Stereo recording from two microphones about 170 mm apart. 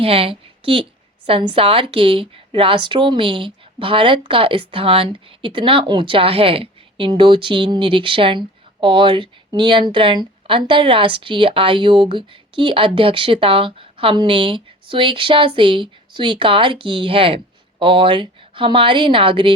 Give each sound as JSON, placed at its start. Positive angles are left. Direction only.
{"t": 0.0, "sound": "a woman's voice", "side_deg": -35}